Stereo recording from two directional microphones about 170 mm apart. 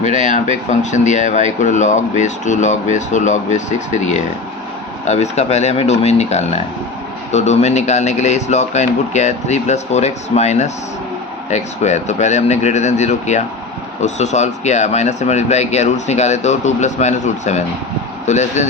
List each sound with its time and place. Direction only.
0.0 s speech: 45° left (ahead or behind)